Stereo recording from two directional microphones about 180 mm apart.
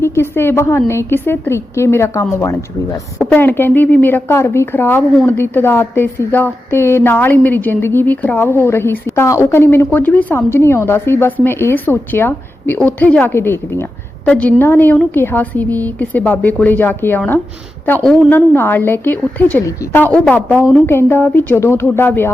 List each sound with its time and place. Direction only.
0.0 s speech: 15° left (ahead or behind)